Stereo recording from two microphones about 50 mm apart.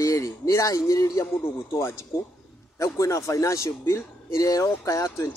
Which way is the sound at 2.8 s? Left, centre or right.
Left.